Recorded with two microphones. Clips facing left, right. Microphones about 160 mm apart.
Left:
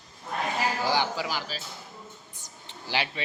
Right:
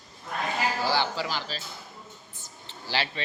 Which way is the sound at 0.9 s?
15° left (ahead or behind).